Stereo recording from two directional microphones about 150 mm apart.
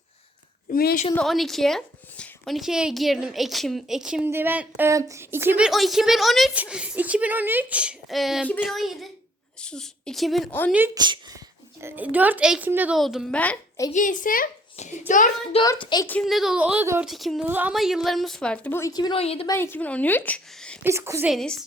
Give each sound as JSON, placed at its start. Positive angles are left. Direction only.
{"t": 0.7, "sound": "a woman's voice", "side_deg": 85}
{"t": 1.1, "sound": "speech", "side_deg": 0}
{"t": 10.7, "sound": "speech", "side_deg": -10}
{"t": 10.9, "sound": "speech", "side_deg": -30}
{"t": 13.3, "sound": "a woman's voice", "side_deg": 10}
{"t": 13.9, "sound": "a child's voice", "side_deg": 60}
{"t": 15.8, "sound": "a woman's voice", "side_deg": 30}
{"t": 16.2, "sound": "speech", "side_deg": 0}
{"t": 17.1, "sound": "speech", "side_deg": 0}
{"t": 17.4, "sound": "a woman's voice", "side_deg": -10}
{"t": 19.2, "sound": "a woman's voice", "side_deg": 40}
{"t": 19.5, "sound": "a woman's voice", "side_deg": 15}
{"t": 20.8, "sound": "speech", "side_deg": -15}
{"t": 21.2, "sound": "speech", "side_deg": 5}